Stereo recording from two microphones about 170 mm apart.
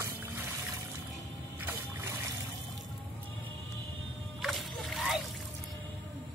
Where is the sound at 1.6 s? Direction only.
15° right (ahead or behind).